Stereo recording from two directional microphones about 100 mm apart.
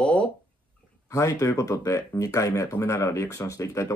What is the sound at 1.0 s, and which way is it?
Speech, 35° left (ahead or behind).